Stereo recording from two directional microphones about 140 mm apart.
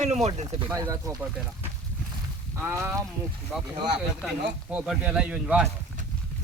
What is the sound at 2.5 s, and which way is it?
Speech, 20° right (ahead or behind).